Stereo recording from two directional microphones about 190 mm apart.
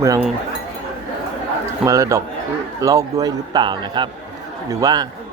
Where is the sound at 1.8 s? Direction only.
15° right (ahead or behind).